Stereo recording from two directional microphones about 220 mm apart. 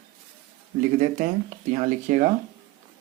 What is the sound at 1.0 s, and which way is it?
Speech, 35° right (ahead or behind).